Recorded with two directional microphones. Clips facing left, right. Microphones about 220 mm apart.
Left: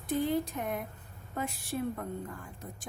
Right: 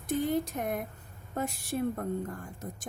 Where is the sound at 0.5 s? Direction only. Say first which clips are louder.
Right 2 dB; 45° right (ahead or behind).